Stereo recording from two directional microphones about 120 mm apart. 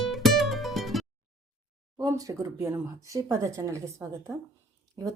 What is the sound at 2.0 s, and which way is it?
Speech, 30° right (ahead or behind).